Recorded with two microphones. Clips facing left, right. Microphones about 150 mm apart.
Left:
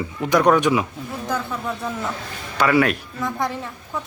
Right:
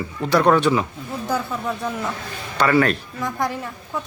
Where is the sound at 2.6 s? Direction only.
10° left (ahead or behind).